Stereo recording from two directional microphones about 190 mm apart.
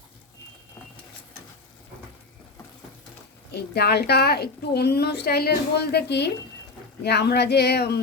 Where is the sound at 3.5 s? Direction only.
60° left (ahead or behind).